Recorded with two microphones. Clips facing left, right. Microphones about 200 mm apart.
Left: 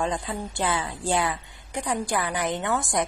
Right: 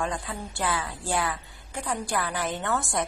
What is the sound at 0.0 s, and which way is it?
A woman's voice, 20° left (ahead or behind).